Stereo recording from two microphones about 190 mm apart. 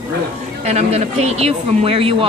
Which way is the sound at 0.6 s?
35° right (ahead or behind).